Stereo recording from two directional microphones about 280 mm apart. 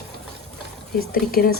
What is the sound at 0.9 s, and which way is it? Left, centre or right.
Speech, left.